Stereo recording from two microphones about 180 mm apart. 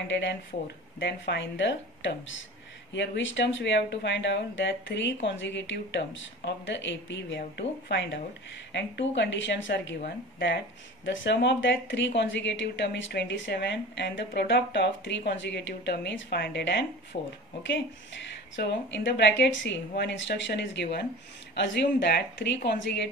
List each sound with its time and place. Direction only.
0.1 s a woman's voice: 75° left (ahead or behind)
18.6 s a woman's voice: 80° left